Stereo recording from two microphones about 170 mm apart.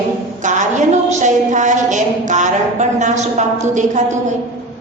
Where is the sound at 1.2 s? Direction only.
45° right (ahead or behind).